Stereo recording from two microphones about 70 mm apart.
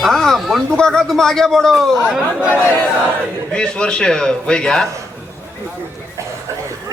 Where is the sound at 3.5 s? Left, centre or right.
Centre.